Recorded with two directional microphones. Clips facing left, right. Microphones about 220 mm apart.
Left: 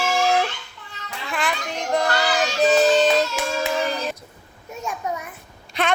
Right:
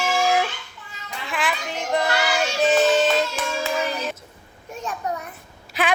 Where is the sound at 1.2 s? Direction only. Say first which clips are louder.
Even; centre (ahead or behind).